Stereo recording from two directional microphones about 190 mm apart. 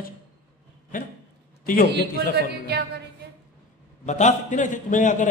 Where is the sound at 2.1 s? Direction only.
60° right (ahead or behind).